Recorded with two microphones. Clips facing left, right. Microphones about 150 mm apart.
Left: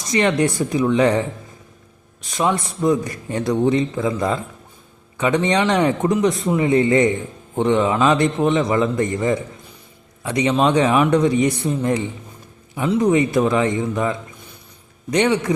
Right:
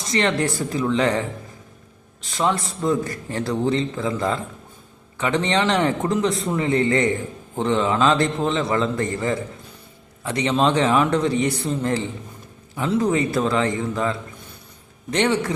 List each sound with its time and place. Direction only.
0.1 s a man's voice: 20° left (ahead or behind)